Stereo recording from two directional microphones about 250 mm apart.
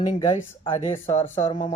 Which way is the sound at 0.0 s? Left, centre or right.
Centre.